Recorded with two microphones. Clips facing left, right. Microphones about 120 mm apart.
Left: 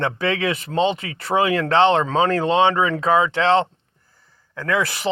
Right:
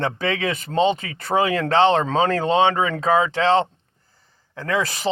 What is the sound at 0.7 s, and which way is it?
Speech, 35° right (ahead or behind).